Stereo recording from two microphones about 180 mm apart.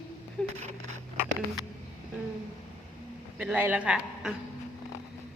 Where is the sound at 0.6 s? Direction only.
40° right (ahead or behind).